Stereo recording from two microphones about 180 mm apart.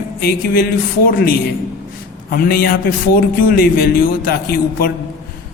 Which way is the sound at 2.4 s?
55° left (ahead or behind).